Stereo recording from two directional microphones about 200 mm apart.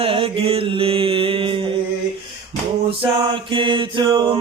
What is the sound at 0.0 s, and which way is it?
Mantra, 25° right (ahead or behind).